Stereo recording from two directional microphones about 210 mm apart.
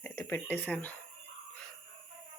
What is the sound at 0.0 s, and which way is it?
Speech, 15° left (ahead or behind).